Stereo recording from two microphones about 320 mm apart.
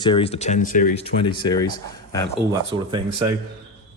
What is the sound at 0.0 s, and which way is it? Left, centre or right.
Speech, centre.